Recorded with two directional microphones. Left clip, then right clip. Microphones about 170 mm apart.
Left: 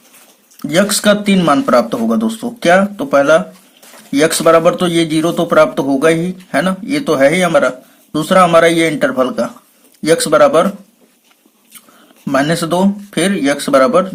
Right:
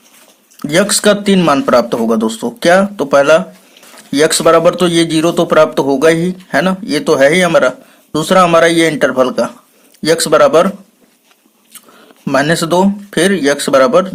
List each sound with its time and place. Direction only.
0.6 s a man's voice: 35° right (ahead or behind)
12.2 s a man's voice: 35° right (ahead or behind)